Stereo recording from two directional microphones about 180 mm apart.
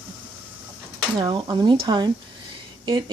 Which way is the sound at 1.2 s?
25° right (ahead or behind).